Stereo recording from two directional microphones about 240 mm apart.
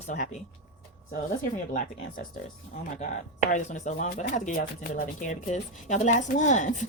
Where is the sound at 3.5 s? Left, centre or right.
Left.